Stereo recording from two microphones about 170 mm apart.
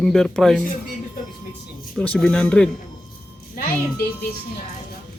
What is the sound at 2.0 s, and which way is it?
Speech, 5° left (ahead or behind).